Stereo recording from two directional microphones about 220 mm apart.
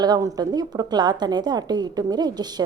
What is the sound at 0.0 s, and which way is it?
A woman's voice, 15° right (ahead or behind).